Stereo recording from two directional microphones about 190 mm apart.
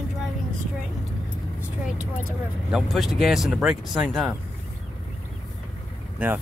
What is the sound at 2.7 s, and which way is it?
Speech, centre (ahead or behind).